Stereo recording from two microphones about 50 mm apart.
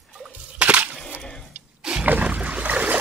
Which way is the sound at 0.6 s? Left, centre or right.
Right.